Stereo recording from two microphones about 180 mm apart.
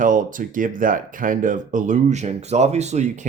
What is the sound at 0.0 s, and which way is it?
Speech, 45° right (ahead or behind).